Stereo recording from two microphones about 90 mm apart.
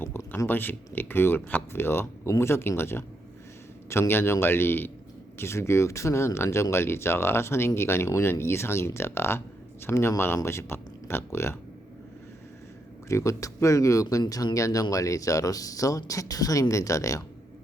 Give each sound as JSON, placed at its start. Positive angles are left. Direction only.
{"t": 0.3, "sound": "speech", "side_deg": 25}
{"t": 13.1, "sound": "speech", "side_deg": 35}